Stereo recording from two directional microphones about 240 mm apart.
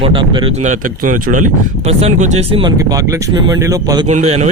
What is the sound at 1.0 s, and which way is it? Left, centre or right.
Speech, right.